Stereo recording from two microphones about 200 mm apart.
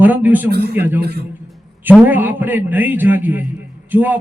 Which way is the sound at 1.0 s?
55° right (ahead or behind).